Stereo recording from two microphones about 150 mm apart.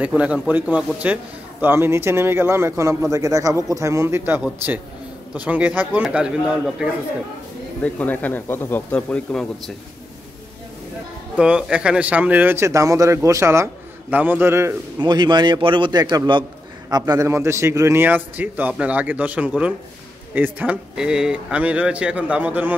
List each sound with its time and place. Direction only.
0.0 s a man's voice: 10° right (ahead or behind)
7.8 s speech: 10° left (ahead or behind)
11.3 s a man's voice: 5° right (ahead or behind)
15.0 s a man's voice: 30° right (ahead or behind); by 22.8 s 10° right (ahead or behind)